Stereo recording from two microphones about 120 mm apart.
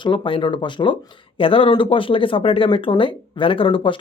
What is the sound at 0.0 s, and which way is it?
Speech, 45° left (ahead or behind).